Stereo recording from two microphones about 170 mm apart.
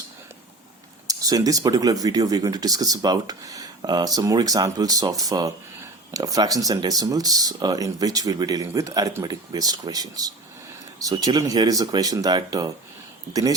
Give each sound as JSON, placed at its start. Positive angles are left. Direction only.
{"t": 1.0, "sound": "speech", "side_deg": -20}